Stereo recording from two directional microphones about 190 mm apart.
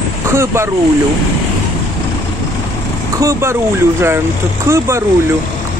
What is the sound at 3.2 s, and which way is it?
Speech, 15° right (ahead or behind).